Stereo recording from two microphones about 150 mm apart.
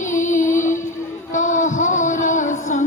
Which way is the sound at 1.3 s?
60° left (ahead or behind).